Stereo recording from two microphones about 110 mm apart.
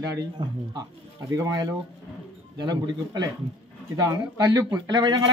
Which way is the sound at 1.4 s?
35° right (ahead or behind).